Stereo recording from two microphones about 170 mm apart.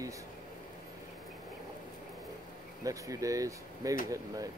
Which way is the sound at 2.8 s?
20° right (ahead or behind).